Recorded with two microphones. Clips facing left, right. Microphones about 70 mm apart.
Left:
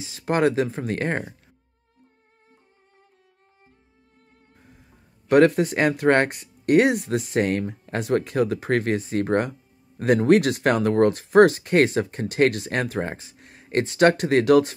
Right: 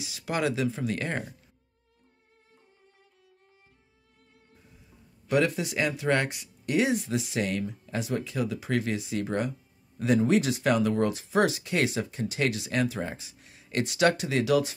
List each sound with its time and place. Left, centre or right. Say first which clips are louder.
0.0 s speech: left 8 dB; left
5.3 s speech: left 9 dB; left